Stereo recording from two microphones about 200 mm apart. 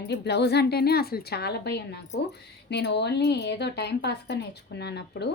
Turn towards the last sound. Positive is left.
turn(degrees=55)  # may be behind; listen again after turning